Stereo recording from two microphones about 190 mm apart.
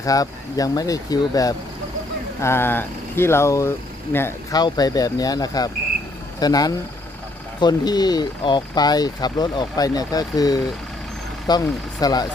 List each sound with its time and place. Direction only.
0.0 s speech: 20° left (ahead or behind)